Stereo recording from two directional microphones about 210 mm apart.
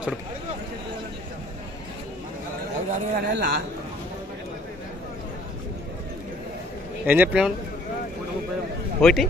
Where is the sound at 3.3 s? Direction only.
50° right (ahead or behind).